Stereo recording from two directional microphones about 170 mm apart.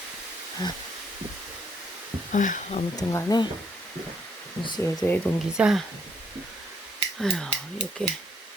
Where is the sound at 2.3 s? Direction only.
50° left (ahead or behind).